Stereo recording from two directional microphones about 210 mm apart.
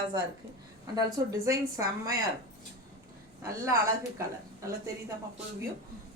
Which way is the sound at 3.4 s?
15° right (ahead or behind).